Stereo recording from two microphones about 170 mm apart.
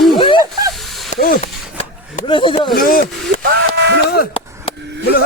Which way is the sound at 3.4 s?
90° right.